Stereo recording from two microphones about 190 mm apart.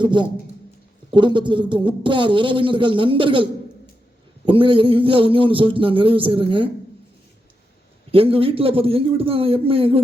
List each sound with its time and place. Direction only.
0.0 s a man's voice: 25° right (ahead or behind)
4.4 s a man's voice: 25° right (ahead or behind)
8.1 s a man's voice: 30° right (ahead or behind)